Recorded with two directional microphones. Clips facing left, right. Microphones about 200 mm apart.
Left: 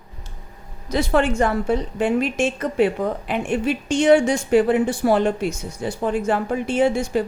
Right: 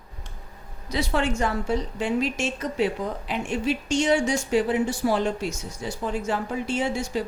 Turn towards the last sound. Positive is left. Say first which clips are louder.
# left 7 dB
turn(degrees=55)  # may be behind; listen again after turning